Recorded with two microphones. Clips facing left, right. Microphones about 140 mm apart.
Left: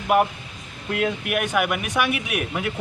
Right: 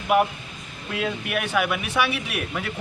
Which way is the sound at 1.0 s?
5° left (ahead or behind).